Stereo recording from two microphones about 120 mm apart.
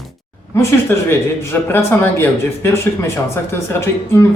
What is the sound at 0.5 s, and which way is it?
Speech, 20° left (ahead or behind).